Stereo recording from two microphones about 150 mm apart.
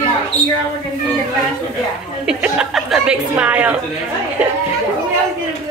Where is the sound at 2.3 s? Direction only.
5° right (ahead or behind).